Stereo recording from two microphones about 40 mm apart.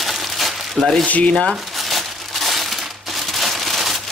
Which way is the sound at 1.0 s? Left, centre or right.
Left.